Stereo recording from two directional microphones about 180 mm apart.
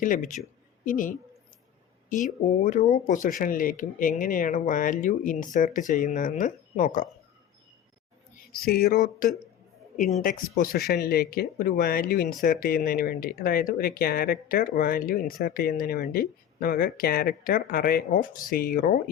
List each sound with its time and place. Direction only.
0.0 s speech: 50° left (ahead or behind)
8.5 s speech: 60° left (ahead or behind)
10.0 s speech: 45° left (ahead or behind)